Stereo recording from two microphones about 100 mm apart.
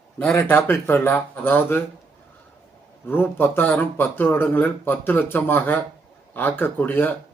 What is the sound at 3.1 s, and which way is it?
A man's voice, 20° left (ahead or behind).